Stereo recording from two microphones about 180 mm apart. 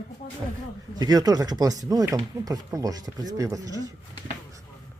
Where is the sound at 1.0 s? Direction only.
20° right (ahead or behind).